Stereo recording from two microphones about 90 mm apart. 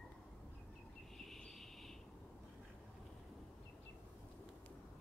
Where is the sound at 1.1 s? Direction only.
5° left (ahead or behind).